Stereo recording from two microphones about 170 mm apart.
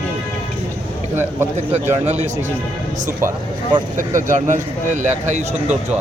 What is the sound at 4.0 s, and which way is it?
Speech, 50° right (ahead or behind).